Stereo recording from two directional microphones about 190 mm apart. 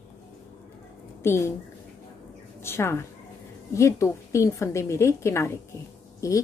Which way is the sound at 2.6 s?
15° left (ahead or behind).